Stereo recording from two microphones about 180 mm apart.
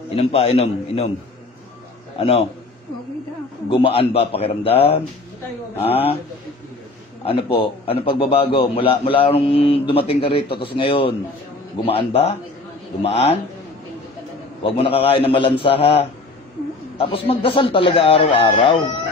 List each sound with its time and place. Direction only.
0.1 s a man's voice: 35° left (ahead or behind)
2.1 s a man's voice: 30° left (ahead or behind)
3.6 s a man's voice: 30° left (ahead or behind)
7.2 s a man's voice: 30° left (ahead or behind)
14.6 s a man's voice: 30° left (ahead or behind)